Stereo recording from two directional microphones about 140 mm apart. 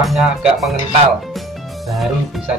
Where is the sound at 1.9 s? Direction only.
Centre (ahead or behind).